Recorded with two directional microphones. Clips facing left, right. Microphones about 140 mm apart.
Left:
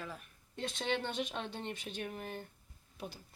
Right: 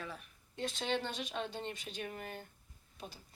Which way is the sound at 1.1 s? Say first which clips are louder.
Left 1 dB; 50° left (ahead or behind).